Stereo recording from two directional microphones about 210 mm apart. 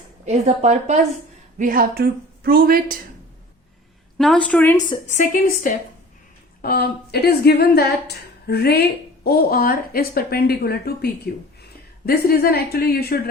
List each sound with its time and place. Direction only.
0.3 s a woman's voice: 35° right (ahead or behind)
4.2 s a woman's voice: 5° left (ahead or behind)
5.0 s a woman's voice: 35° left (ahead or behind)